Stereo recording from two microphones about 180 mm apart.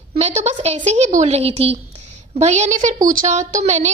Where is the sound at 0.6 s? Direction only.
35° right (ahead or behind).